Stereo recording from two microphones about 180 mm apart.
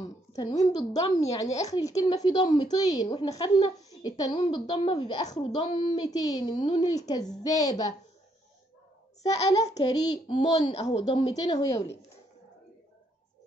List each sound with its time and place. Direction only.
0.0 s a sound: 25° left (ahead or behind)
0.7 s a woman's voice: 20° left (ahead or behind)
9.6 s a woman's voice: 20° left (ahead or behind)
10.4 s a woman's voice: 35° left (ahead or behind); by 11.9 s 20° left (ahead or behind)